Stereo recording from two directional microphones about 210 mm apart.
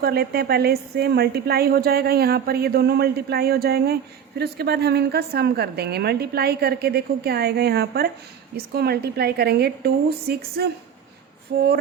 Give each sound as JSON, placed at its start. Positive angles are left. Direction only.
{"t": 0.0, "sound": "a woman's voice", "side_deg": -50}